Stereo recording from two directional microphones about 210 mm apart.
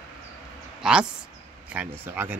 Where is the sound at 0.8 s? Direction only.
5° right (ahead or behind).